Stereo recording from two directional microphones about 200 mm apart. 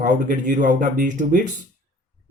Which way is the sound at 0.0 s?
40° right (ahead or behind).